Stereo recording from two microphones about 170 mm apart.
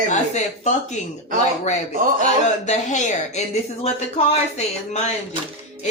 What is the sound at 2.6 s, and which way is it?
Speech, 45° left (ahead or behind).